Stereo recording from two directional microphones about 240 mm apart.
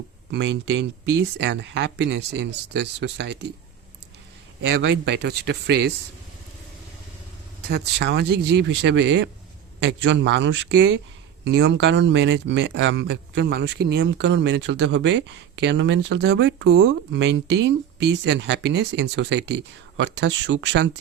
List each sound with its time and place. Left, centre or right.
0.3 s speech: right
4.6 s speech: right
7.7 s speech: right